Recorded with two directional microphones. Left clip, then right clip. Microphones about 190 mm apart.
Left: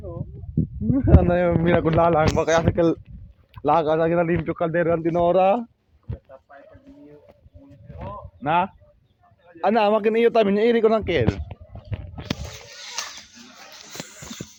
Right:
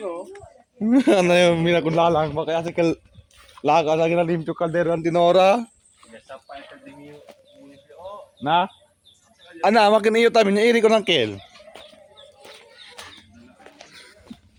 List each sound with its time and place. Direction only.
0.9 s speech: 20° right (ahead or behind)
1.6 s a man's voice: 5° right (ahead or behind)
2.1 s speech: 10° left (ahead or behind)
2.7 s a man's voice: centre (ahead or behind)
3.6 s a man's voice: 10° right (ahead or behind)
8.4 s a man's voice: 15° right (ahead or behind)